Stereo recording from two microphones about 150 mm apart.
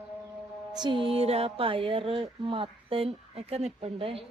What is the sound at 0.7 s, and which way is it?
Music, 30° right (ahead or behind).